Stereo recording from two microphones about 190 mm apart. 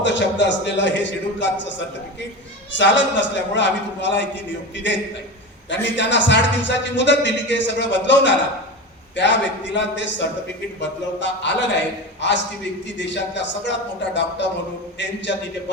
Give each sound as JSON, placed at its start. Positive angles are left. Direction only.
{"t": 0.0, "sound": "a man's voice", "side_deg": 70}
{"t": 2.7, "sound": "a man's voice", "side_deg": 70}